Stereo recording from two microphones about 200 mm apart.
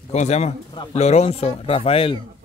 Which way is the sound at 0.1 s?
35° left (ahead or behind).